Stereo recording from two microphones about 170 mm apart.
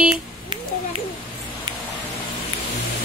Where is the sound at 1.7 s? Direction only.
30° right (ahead or behind).